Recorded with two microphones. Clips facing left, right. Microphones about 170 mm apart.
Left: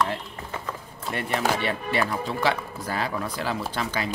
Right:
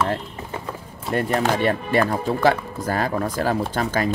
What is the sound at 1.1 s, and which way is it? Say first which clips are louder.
Speech: right 5 dB; 45° right (ahead or behind).